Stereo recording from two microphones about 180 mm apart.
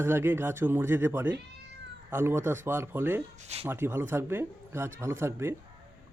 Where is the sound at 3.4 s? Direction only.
40° right (ahead or behind).